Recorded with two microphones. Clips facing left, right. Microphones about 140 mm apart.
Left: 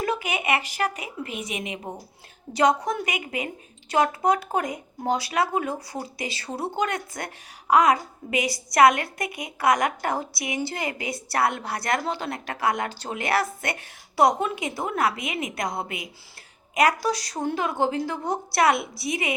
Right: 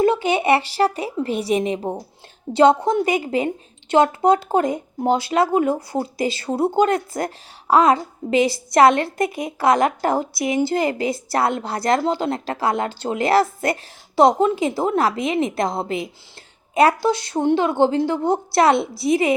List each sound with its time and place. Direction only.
0.0 s a woman's voice: 30° right (ahead or behind)